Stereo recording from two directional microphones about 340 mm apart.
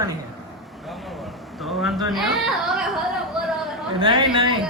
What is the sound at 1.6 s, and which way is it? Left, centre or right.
Speech, centre.